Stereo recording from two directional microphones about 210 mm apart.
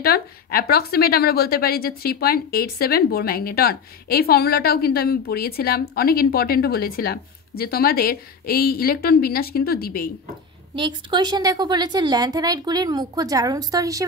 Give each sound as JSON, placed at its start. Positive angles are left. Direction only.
{"t": 0.0, "sound": "a woman's voice", "side_deg": 45}
{"t": 10.8, "sound": "a woman's voice", "side_deg": -20}